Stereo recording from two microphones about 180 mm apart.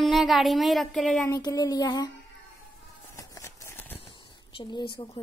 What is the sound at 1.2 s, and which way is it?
Child singing, 20° left (ahead or behind).